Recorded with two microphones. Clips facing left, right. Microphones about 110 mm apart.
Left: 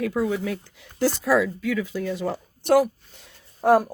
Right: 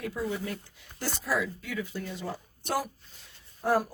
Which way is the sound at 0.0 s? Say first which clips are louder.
Left 8 dB; 90° left.